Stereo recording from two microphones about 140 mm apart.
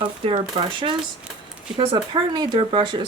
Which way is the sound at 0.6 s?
40° right (ahead or behind).